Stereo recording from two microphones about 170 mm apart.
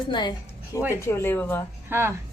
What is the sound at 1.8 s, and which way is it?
Speech, 15° right (ahead or behind).